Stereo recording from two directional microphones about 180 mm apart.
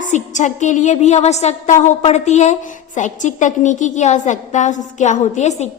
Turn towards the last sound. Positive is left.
turn(degrees=40)  # may be behind; listen again after turning